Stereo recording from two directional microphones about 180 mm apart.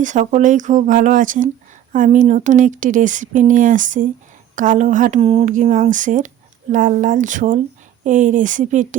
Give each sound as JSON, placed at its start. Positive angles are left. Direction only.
{"t": 0.0, "sound": "speech", "side_deg": -45}
{"t": 5.2, "sound": "speech", "side_deg": -35}